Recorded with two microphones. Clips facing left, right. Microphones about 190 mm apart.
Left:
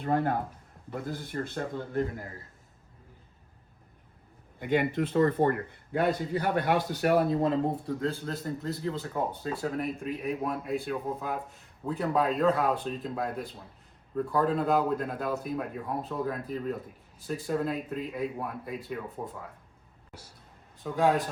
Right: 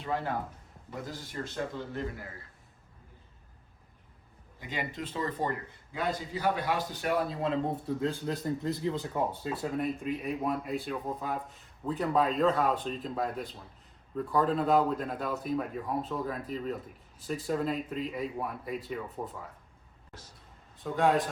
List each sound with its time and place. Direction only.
0.0 s a man's voice: 55° left (ahead or behind)
4.6 s speech: 55° left (ahead or behind)
8.3 s a man's voice: 5° right (ahead or behind)
20.1 s speech: 10° left (ahead or behind)